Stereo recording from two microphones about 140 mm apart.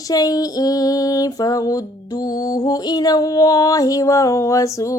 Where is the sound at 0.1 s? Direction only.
25° left (ahead or behind).